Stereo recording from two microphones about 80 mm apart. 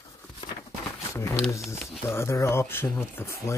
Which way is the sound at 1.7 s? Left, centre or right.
Left.